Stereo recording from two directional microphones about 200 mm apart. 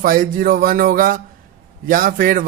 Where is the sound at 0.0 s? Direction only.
45° right (ahead or behind).